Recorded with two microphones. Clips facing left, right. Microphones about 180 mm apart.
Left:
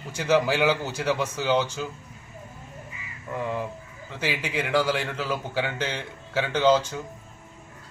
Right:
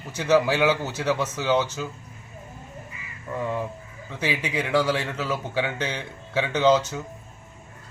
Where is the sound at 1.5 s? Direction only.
10° right (ahead or behind).